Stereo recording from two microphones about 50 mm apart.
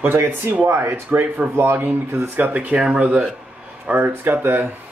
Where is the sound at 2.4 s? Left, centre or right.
Right.